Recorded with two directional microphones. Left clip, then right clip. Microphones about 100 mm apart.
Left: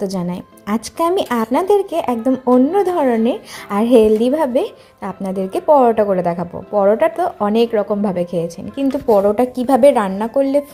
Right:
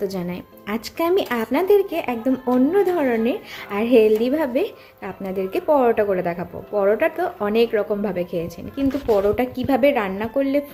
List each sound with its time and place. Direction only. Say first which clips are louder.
0.0 s speech: left 3 dB; 35° left (ahead or behind)
10.2 s speech: left 5 dB; 35° left (ahead or behind)